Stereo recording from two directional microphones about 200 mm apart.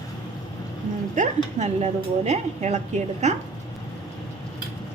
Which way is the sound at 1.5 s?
35° right (ahead or behind).